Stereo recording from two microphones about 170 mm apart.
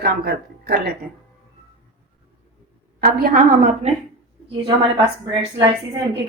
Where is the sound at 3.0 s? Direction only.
60° right (ahead or behind).